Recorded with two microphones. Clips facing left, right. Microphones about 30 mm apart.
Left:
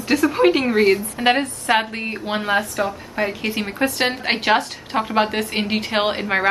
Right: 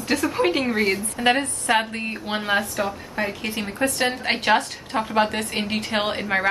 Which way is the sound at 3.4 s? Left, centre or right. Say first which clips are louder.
Left 3 dB; left.